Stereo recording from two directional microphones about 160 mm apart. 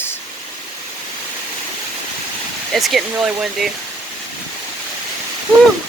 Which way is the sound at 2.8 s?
Centre (ahead or behind).